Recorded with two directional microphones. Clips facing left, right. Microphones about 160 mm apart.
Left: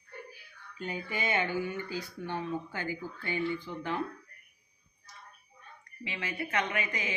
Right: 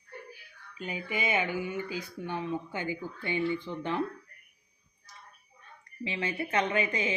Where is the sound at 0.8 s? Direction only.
15° right (ahead or behind).